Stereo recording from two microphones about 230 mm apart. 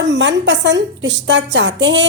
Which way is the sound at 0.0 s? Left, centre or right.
Right.